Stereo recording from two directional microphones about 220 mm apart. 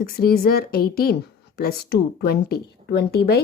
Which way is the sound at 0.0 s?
45° left (ahead or behind).